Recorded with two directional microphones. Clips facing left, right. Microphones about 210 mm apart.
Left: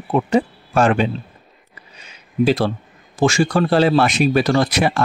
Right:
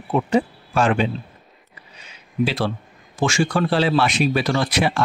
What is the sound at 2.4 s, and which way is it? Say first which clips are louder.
Speech: left 5 dB; 45° left (ahead or behind).